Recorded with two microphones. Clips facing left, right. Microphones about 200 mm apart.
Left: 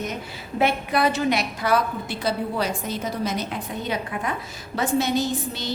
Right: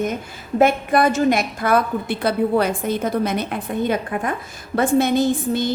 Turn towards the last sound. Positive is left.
turn(degrees=-50)  # may be behind; listen again after turning